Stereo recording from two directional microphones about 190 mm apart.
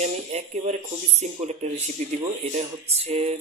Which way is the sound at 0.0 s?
35° right (ahead or behind).